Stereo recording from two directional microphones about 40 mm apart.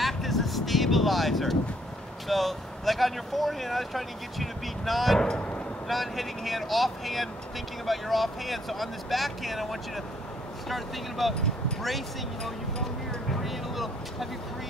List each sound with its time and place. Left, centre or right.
0.0 s vehicle: centre
2.2 s speech: centre
5.2 s speech: centre
5.9 s speech: centre
13.4 s vehicle: centre